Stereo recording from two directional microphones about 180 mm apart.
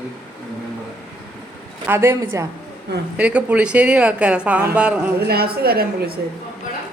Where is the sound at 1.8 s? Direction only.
15° right (ahead or behind).